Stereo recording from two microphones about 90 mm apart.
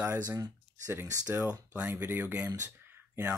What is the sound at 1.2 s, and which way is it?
Speech, 15° right (ahead or behind).